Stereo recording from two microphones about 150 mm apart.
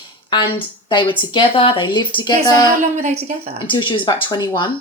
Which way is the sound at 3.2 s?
45° right (ahead or behind).